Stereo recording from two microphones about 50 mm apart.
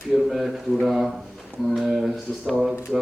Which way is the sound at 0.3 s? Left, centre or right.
Centre.